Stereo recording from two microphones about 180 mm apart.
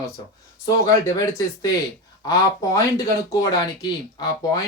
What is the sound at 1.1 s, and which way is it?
Speech, 20° left (ahead or behind).